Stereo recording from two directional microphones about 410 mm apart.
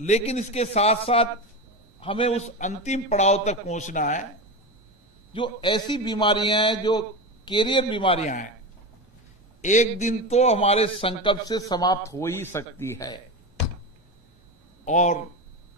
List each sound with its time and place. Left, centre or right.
0.0 s a man's voice: centre
5.3 s a man's voice: centre
9.6 s a man's voice: centre
14.9 s a man's voice: centre